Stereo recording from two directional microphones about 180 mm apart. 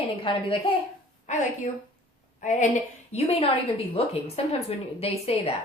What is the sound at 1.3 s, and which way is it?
A woman's voice, 40° left (ahead or behind).